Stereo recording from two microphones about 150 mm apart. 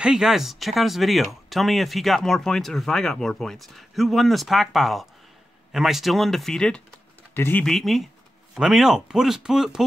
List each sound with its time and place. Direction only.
0.0 s speech: 5° right (ahead or behind); by 7.6 s 15° left (ahead or behind)
7.6 s speech: centre (ahead or behind)